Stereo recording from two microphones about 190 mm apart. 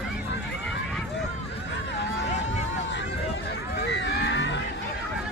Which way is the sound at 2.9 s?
65° left (ahead or behind).